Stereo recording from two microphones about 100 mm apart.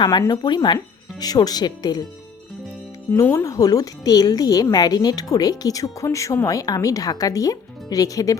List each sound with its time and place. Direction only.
0.0 s speech: 45° left (ahead or behind)
3.3 s speech: 35° left (ahead or behind)